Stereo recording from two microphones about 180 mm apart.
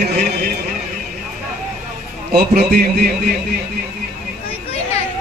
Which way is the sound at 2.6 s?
55° right (ahead or behind).